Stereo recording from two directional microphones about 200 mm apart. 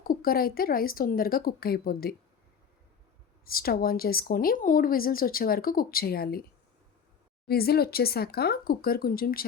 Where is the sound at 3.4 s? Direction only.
50° left (ahead or behind).